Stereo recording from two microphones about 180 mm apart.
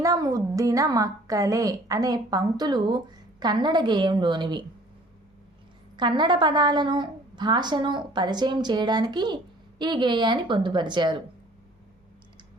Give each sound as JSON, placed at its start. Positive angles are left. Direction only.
{"t": 0.0, "sound": "a woman's voice", "side_deg": -20}
{"t": 6.0, "sound": "a woman's voice", "side_deg": -25}